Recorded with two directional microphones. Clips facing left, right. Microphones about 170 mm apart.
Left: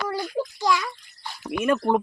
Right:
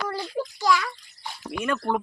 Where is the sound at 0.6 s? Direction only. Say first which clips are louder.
Right 1 dB; 20° left (ahead or behind).